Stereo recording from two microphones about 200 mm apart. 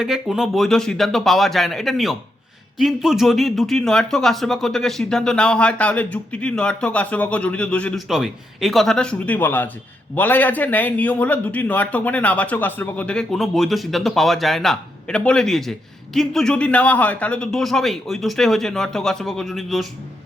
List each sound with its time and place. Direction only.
0.0 s a man's voice: centre (ahead or behind)